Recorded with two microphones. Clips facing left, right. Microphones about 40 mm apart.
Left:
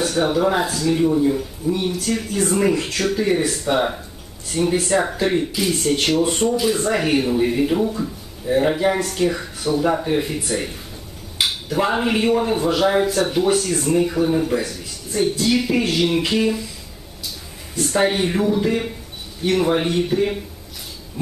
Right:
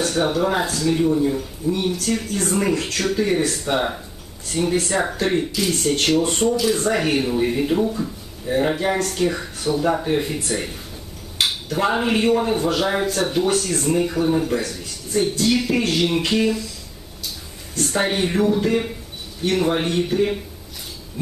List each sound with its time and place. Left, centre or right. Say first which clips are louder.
0.0 s speech: left 2 dB; centre
17.7 s speech: left 2 dB; centre